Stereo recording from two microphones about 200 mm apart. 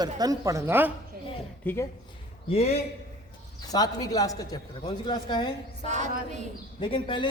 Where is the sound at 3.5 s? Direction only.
20° left (ahead or behind).